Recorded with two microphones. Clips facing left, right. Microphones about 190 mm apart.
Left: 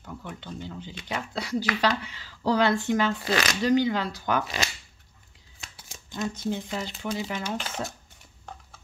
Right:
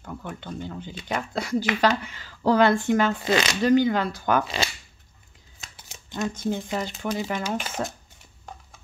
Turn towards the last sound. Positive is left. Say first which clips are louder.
# right 3 dB
turn(degrees=-55)  # may be behind; listen again after turning